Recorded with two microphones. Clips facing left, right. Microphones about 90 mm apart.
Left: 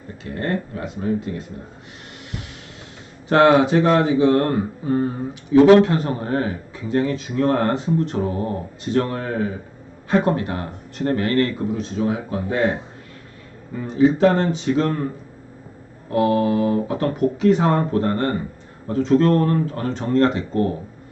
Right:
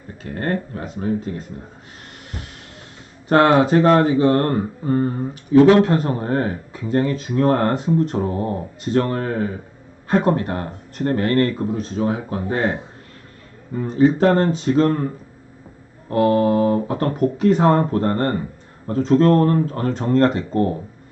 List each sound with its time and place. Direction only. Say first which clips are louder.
0.3 s speech: right 1 dB; 40° right (ahead or behind)
3.2 s speech: even; 45° right (ahead or behind)
13.7 s speech: right 1 dB; 45° right (ahead or behind)
16.0 s speech: right 2 dB; 45° right (ahead or behind)